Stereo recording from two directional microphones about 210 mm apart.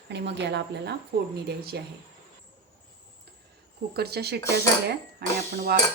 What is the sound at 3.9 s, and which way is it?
Speech, 50° right (ahead or behind).